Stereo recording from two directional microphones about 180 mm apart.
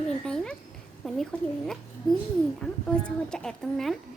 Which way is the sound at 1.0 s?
5° left (ahead or behind).